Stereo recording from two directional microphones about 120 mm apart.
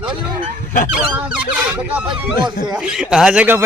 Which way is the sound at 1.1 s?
15° right (ahead or behind).